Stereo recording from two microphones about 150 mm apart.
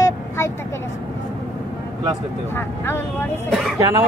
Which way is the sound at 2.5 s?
15° left (ahead or behind).